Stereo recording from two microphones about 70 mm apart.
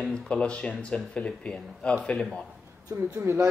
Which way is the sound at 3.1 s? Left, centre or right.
Right.